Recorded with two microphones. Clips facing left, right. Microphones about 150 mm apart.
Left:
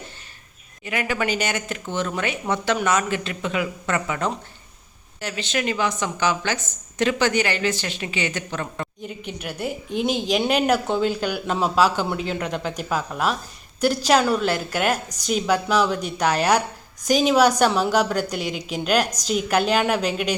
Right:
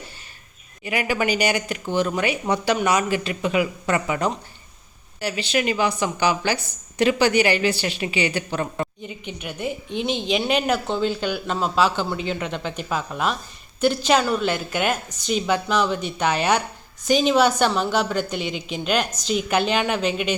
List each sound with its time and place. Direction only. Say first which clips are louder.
0.9 s speech: right 2 dB; 10° right (ahead or behind)
9.0 s a woman's voice: left 1 dB; centre (ahead or behind)
17.7 s a woman's voice: left 2 dB; 15° left (ahead or behind)
17.9 s a woman's voice: left 1 dB; centre (ahead or behind)